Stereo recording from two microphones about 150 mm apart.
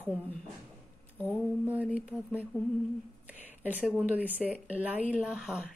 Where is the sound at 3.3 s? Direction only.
10° right (ahead or behind).